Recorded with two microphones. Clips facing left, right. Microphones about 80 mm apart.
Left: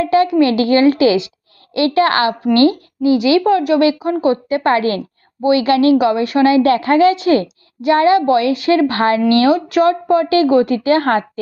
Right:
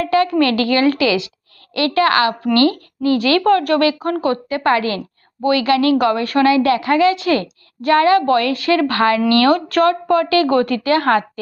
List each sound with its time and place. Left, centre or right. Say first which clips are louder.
0.0 s a woman's voice: left 3 dB; left
9.5 s a woman's voice: left 1 dB; centre; by 11.2 s left